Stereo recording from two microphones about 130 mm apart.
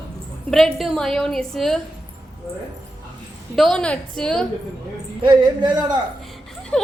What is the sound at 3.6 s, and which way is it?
Speech, 5° left (ahead or behind).